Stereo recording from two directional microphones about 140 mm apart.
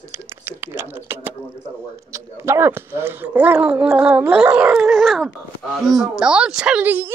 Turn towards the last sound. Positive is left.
turn(degrees=-10)  # may be behind; listen again after turning